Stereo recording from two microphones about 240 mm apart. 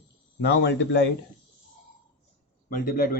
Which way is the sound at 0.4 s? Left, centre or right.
Left.